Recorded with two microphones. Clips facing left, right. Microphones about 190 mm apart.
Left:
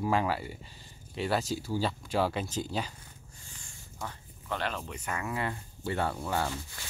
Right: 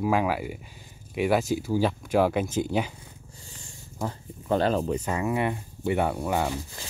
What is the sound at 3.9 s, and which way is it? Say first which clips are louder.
Speech: right 9 dB; 35° right (ahead or behind).